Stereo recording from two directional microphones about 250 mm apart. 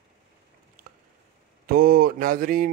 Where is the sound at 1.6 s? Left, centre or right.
Right.